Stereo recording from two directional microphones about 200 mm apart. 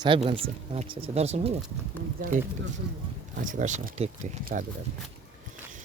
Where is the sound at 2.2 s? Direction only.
45° right (ahead or behind).